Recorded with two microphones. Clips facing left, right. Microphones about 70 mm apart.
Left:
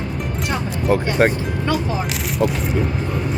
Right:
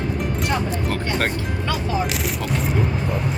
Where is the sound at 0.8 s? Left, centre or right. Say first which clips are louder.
Left 7 dB; centre.